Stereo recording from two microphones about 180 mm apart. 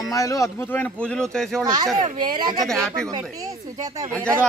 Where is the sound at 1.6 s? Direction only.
20° right (ahead or behind).